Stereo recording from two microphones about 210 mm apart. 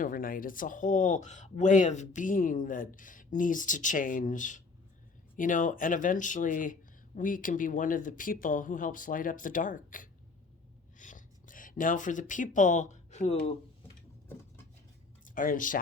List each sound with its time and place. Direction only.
0.0 s speech: 40° left (ahead or behind)
10.9 s a sound: 40° left (ahead or behind)
15.2 s speech: 40° left (ahead or behind)